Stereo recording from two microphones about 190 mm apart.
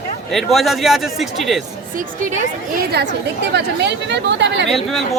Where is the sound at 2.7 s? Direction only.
60° right (ahead or behind).